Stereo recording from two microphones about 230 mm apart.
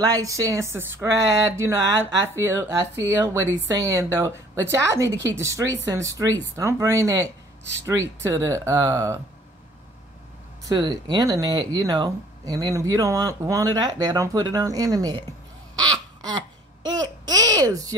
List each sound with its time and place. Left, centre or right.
0.0 s speech: centre
10.6 s speech: centre
16.2 s babbling: centre